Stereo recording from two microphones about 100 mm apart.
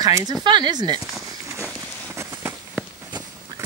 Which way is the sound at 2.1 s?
30° right (ahead or behind).